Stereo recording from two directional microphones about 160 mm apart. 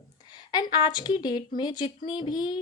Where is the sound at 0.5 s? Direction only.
30° left (ahead or behind).